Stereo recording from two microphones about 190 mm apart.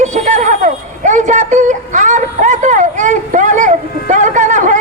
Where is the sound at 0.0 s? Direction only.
40° right (ahead or behind).